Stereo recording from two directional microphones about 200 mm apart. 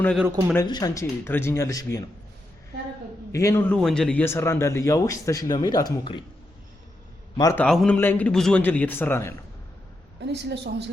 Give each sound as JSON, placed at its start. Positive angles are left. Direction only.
{"t": 0.5, "sound": "a man's voice", "side_deg": 20}
{"t": 3.3, "sound": "a man's voice", "side_deg": 15}
{"t": 7.3, "sound": "a man's voice", "side_deg": 15}
{"t": 7.6, "sound": "a man's voice", "side_deg": 5}
{"t": 10.2, "sound": "a woman's voice", "side_deg": -60}